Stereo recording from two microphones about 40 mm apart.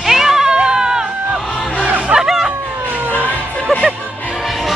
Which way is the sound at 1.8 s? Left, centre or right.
Right.